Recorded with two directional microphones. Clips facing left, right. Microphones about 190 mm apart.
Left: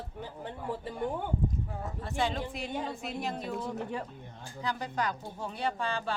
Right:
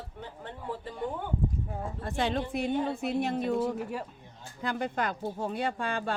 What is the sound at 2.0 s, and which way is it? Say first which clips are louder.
Speech: right 2 dB; 50° right (ahead or behind).